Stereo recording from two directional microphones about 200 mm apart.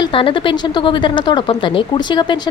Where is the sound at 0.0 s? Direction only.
25° left (ahead or behind).